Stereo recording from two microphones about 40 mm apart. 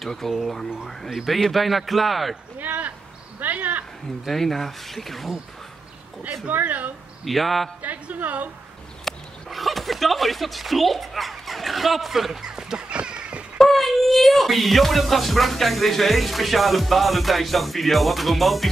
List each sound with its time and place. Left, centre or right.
0.0 s speech: centre
2.6 s a sound: right
3.3 s speech: right
4.3 s speech: centre
6.6 s speech: right
7.2 s speech: centre
7.8 s a woman's voice: right
9.0 s speech: centre
12.9 s a sound: right
13.6 s speech: centre